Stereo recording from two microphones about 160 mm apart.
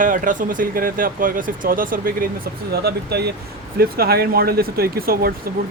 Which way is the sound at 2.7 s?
85° right.